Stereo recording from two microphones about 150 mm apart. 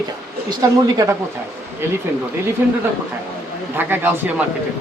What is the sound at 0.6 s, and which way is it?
Speech, 25° right (ahead or behind).